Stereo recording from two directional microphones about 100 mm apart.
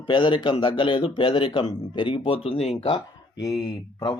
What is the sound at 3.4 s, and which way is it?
Speech, 40° left (ahead or behind).